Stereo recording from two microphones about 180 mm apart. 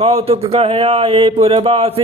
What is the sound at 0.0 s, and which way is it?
A man's voice, 35° right (ahead or behind).